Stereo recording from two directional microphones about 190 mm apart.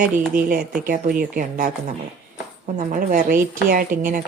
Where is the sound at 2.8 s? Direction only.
45° right (ahead or behind).